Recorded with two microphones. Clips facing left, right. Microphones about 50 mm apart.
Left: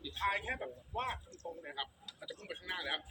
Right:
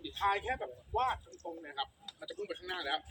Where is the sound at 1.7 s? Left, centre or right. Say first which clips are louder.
Right 4 dB; centre.